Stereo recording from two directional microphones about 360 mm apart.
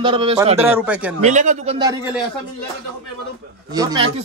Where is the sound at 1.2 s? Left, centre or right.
Centre.